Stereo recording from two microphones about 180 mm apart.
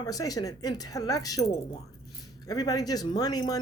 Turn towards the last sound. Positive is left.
turn(degrees=20)  # may be behind; listen again after turning